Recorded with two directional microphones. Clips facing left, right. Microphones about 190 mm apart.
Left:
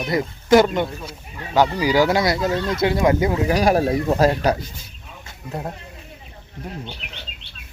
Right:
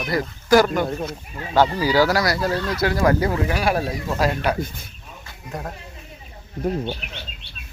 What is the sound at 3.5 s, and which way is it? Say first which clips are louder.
Speech: left 5 dB; 40° left (ahead or behind).